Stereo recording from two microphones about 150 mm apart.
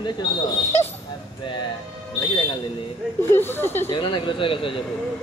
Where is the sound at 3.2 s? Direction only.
15° left (ahead or behind).